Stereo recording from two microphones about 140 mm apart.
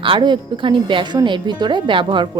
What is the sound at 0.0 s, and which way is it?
Speech, 35° right (ahead or behind).